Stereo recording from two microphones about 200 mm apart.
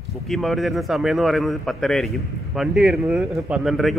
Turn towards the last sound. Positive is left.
turn(degrees=0)  # may be behind; listen again after turning